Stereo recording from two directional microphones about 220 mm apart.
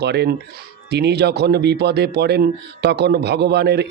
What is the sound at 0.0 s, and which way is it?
Speech, 50° right (ahead or behind).